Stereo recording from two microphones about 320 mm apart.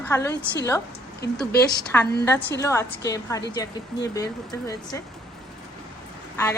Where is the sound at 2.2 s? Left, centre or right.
Centre.